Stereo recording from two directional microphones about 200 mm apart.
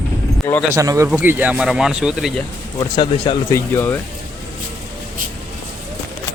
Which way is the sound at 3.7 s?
10° left (ahead or behind).